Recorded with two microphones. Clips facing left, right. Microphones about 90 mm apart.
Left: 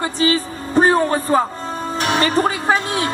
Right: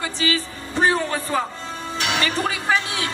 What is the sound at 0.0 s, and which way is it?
A man's voice, 40° left (ahead or behind).